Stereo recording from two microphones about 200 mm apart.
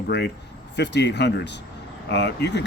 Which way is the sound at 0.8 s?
60° left (ahead or behind).